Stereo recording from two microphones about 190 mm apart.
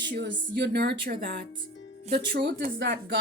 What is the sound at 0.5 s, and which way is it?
Speech, 60° right (ahead or behind).